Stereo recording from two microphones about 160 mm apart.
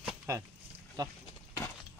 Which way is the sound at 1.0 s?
25° right (ahead or behind).